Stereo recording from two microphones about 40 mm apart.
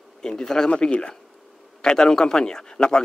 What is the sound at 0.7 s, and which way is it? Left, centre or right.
Speech, left.